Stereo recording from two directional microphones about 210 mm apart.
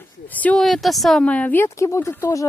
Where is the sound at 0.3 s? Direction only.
5° left (ahead or behind).